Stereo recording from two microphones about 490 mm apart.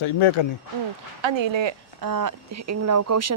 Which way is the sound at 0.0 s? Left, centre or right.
Left.